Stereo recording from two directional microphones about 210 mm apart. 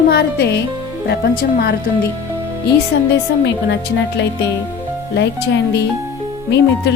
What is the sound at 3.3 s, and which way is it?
Speech, 60° left (ahead or behind).